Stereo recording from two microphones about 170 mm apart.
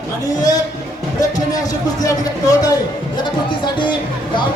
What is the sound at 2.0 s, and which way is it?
Speech, 20° left (ahead or behind).